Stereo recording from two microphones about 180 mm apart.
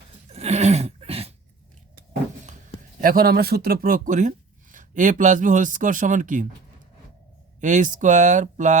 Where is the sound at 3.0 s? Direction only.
55° right (ahead or behind).